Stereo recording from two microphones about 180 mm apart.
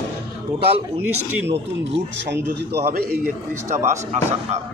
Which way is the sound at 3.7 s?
40° right (ahead or behind).